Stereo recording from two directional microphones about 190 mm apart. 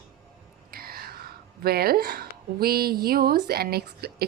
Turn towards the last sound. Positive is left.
turn(degrees=-55)  # may be behind; listen again after turning